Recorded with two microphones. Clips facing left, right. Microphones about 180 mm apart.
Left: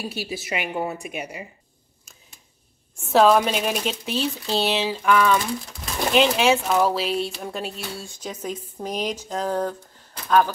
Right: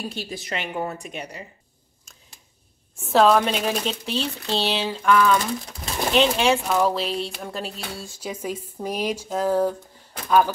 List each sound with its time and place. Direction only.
0.0 s a woman's voice: 5° left (ahead or behind)
3.1 s speech: centre (ahead or behind)